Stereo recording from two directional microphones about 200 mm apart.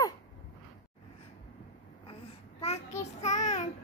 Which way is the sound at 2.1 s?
30° left (ahead or behind).